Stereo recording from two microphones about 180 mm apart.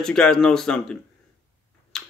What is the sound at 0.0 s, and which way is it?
Speech, 5° left (ahead or behind).